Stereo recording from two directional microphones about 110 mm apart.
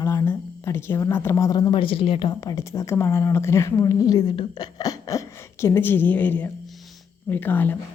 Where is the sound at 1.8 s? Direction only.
55° left (ahead or behind).